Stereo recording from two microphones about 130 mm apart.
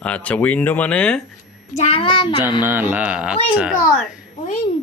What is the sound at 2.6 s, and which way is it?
Speech, 15° right (ahead or behind).